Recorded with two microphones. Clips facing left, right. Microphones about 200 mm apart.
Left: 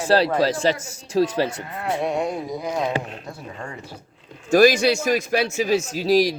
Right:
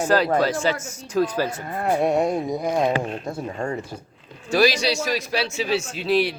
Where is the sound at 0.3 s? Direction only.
35° left (ahead or behind).